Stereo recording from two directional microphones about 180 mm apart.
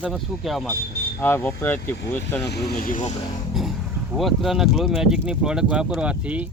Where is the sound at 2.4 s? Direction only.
65° left (ahead or behind); by 3.1 s 45° left (ahead or behind).